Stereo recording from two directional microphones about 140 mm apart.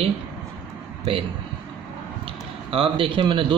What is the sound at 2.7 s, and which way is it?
Speech, 40° right (ahead or behind).